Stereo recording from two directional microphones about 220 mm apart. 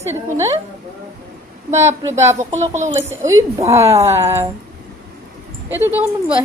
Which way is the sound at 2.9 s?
15° right (ahead or behind).